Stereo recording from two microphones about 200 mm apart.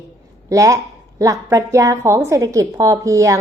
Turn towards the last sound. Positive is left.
turn(degrees=-15)  # may be behind; listen again after turning